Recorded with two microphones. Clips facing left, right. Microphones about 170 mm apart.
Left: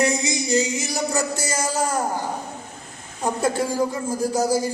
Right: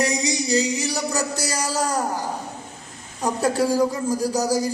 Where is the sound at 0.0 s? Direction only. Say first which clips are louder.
Left 1 dB; 35° right (ahead or behind).